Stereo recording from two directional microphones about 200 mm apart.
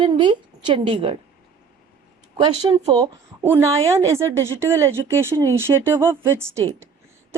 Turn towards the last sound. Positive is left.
turn(degrees=-15)  # may be behind; listen again after turning